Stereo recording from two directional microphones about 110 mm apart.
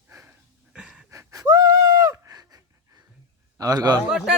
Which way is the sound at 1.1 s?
30° right (ahead or behind).